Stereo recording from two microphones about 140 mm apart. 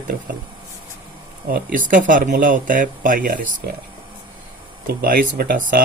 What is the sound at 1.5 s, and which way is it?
Speech, 75° right (ahead or behind).